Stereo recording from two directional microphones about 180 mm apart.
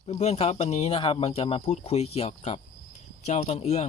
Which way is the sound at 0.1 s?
35° left (ahead or behind).